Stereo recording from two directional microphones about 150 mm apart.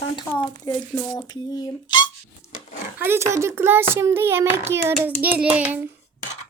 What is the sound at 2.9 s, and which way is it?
A child's voice, 15° right (ahead or behind).